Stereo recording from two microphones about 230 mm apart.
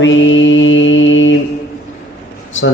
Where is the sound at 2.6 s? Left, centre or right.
Left.